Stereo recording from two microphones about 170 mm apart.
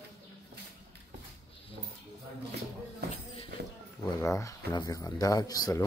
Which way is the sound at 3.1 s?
35° left (ahead or behind).